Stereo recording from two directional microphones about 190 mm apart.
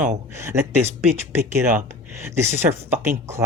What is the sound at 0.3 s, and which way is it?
Speech, 15° right (ahead or behind).